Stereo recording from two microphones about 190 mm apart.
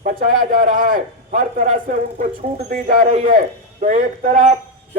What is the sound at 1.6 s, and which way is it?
Speech, 40° right (ahead or behind).